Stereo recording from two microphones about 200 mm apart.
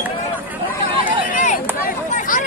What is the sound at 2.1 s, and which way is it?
Hubbub, 40° left (ahead or behind).